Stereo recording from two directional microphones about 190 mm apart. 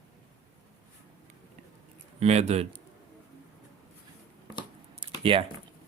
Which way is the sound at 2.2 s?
35° right (ahead or behind).